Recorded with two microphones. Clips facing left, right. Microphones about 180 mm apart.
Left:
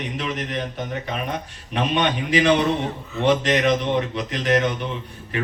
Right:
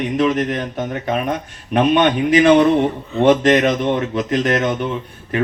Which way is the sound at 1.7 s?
55° right (ahead or behind).